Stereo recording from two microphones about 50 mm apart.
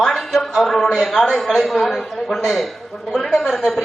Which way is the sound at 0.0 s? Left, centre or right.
Centre.